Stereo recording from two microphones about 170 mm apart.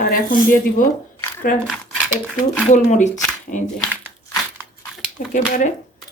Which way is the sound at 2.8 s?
45° left (ahead or behind).